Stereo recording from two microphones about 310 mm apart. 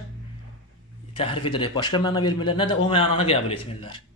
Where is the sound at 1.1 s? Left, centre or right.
Centre.